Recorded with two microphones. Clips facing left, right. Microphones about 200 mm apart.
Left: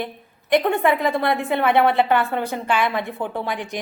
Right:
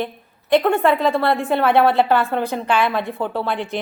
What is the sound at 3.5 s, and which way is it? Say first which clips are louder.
Speech: right 4 dB; 15° left (ahead or behind).